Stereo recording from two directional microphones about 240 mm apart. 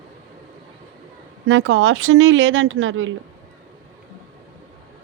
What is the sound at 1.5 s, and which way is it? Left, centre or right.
Speech, right.